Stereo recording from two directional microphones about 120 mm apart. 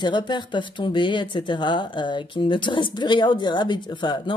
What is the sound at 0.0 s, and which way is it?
Speech, 40° left (ahead or behind).